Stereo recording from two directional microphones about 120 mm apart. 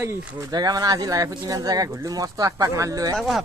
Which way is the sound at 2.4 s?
30° right (ahead or behind).